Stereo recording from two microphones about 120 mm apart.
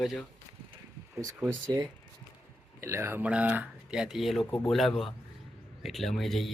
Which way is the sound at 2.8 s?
25° right (ahead or behind).